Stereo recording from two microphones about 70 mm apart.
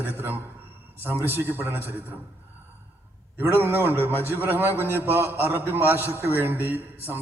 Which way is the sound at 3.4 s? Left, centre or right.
Right.